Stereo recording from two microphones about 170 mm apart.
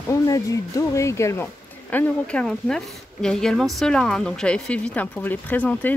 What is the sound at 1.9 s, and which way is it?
A woman's voice, 5° left (ahead or behind).